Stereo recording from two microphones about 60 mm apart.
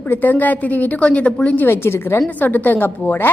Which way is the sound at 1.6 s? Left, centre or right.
Left.